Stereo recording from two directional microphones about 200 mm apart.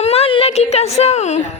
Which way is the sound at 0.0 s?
30° left (ahead or behind).